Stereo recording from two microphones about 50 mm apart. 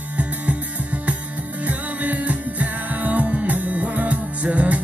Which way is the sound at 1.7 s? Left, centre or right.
Right.